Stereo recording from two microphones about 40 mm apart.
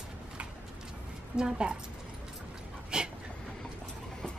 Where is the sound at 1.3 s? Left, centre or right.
Right.